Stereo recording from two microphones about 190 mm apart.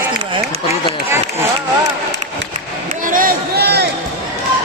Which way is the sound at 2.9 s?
45° right (ahead or behind).